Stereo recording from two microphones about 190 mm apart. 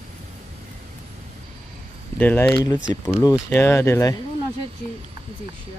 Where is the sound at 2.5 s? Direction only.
20° left (ahead or behind).